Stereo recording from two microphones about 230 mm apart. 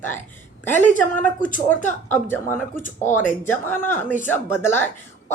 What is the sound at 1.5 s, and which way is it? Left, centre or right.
Speech, left.